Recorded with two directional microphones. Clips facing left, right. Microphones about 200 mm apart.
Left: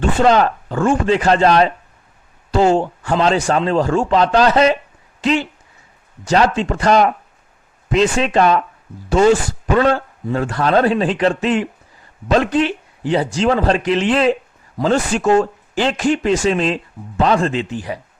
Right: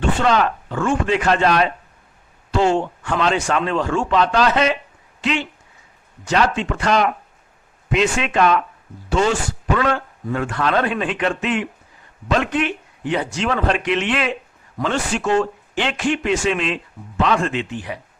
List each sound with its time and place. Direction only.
0.2 s speech: 40° left (ahead or behind)